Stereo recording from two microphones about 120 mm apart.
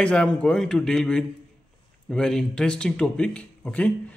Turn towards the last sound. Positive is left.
turn(degrees=10)  # may be behind; listen again after turning